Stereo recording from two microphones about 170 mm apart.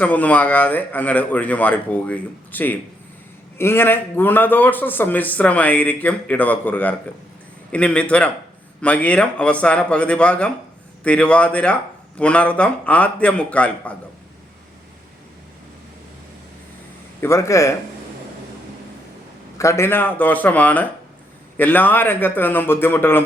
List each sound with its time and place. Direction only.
0.0 s a man's voice: 10° left (ahead or behind)
17.2 s a man's voice: 15° left (ahead or behind)
19.5 s a man's voice: 15° left (ahead or behind)